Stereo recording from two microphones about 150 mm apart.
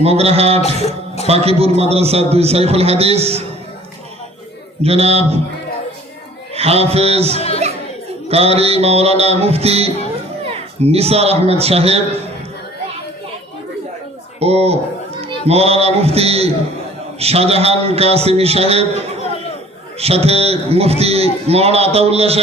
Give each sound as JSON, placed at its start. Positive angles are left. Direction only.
{"t": 0.0, "sound": "a man's voice", "side_deg": -45}
{"t": 0.8, "sound": "music", "side_deg": 45}
{"t": 1.3, "sound": "a man's voice", "side_deg": -40}
{"t": 4.8, "sound": "a man's voice", "side_deg": -40}
{"t": 6.5, "sound": "speech", "side_deg": -40}
{"t": 7.3, "sound": "speech", "side_deg": 45}
{"t": 8.3, "sound": "a man's voice", "side_deg": -45}
{"t": 14.3, "sound": "a man's voice", "side_deg": -45}
{"t": 20.0, "sound": "a man's voice", "side_deg": -45}